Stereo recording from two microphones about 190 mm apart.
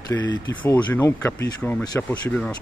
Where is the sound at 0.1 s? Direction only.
15° left (ahead or behind).